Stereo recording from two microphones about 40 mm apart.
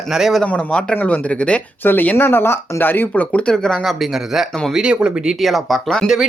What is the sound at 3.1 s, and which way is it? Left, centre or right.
Speech, left.